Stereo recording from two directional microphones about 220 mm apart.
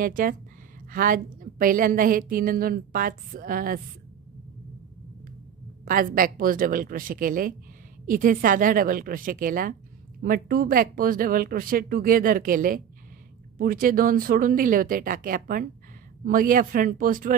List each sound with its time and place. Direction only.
0.0 s a woman's voice: 40° right (ahead or behind)
5.9 s a woman's voice: 40° right (ahead or behind)